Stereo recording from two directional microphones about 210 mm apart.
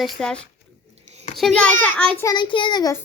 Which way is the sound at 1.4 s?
5° left (ahead or behind).